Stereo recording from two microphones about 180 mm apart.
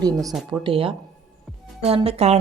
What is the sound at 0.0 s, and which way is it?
Speech, 20° right (ahead or behind).